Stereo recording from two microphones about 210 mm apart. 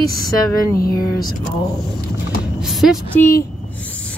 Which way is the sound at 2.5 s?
Centre (ahead or behind).